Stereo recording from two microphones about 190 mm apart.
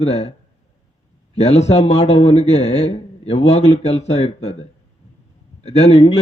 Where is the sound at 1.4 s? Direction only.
35° left (ahead or behind).